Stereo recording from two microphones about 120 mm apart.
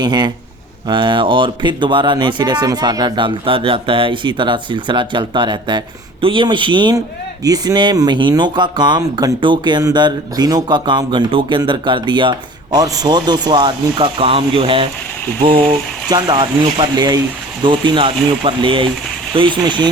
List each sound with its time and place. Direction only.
0.0 s speech: 35° right (ahead or behind)